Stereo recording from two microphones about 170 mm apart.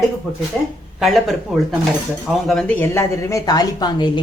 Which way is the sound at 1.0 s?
Centre (ahead or behind).